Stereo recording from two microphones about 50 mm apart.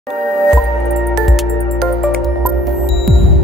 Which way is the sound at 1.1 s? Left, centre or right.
Centre.